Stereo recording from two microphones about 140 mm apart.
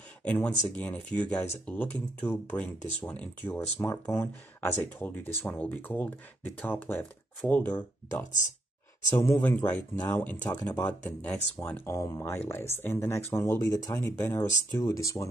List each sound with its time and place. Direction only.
0.2 s speech: 10° left (ahead or behind)